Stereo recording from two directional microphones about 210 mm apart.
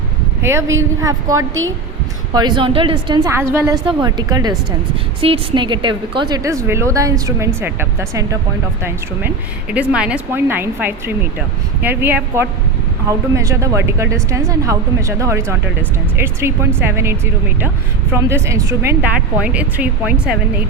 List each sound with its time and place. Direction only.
0.4 s a woman's voice: 15° right (ahead or behind)